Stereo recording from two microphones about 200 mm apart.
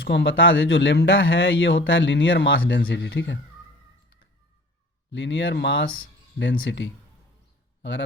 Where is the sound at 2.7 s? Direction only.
55° left (ahead or behind).